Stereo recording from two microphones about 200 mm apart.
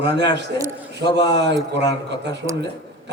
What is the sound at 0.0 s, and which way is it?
Speech, 60° right (ahead or behind).